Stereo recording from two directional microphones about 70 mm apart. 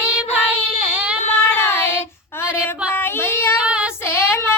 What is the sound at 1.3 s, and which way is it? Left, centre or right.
Child singing, left.